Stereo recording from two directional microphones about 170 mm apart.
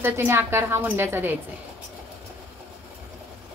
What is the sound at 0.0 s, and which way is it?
A woman's voice, 15° right (ahead or behind).